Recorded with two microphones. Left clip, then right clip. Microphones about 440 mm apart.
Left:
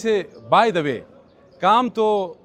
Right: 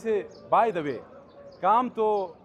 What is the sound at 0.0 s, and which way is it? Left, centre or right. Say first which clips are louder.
A man's voice: left 7 dB; left.